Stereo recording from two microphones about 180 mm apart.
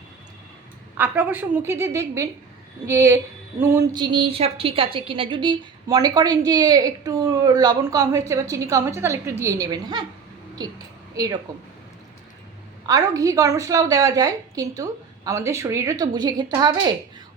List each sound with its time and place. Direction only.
0.9 s a woman's voice: 10° right (ahead or behind)
3.9 s a woman's voice: 25° right (ahead or behind)
12.9 s a woman's voice: 20° right (ahead or behind)